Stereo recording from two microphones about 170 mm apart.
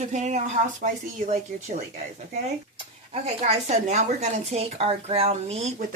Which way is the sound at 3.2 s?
40° right (ahead or behind).